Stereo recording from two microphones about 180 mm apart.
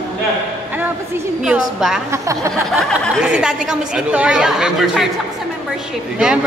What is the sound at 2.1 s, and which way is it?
Speech, 15° right (ahead or behind).